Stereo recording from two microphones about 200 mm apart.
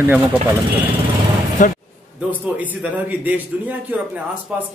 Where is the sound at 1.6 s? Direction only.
40° left (ahead or behind).